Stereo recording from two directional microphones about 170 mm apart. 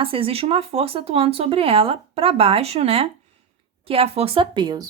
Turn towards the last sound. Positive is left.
turn(degrees=-25)  # may be behind; listen again after turning